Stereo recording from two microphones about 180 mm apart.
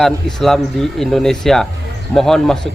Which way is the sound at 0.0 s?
Centre (ahead or behind).